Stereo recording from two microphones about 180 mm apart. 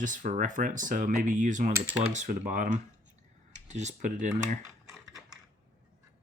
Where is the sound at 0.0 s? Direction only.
45° right (ahead or behind).